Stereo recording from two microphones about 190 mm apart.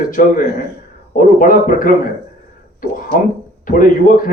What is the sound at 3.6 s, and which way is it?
Speech, 45° left (ahead or behind).